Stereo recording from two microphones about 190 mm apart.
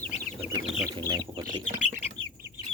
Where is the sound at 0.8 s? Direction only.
20° right (ahead or behind).